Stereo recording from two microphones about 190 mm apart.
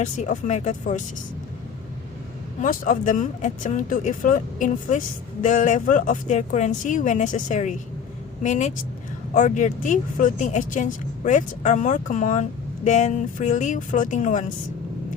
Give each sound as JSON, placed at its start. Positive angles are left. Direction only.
{"t": 0.0, "sound": "speech", "side_deg": 40}
{"t": 2.6, "sound": "speech", "side_deg": 45}